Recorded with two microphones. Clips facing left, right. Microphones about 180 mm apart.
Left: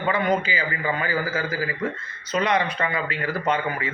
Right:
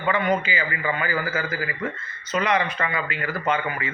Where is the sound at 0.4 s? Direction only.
35° left (ahead or behind).